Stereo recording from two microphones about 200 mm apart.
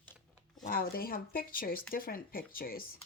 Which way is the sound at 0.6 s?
45° left (ahead or behind).